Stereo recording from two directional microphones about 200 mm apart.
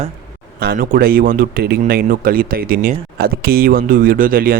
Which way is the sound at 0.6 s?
45° right (ahead or behind).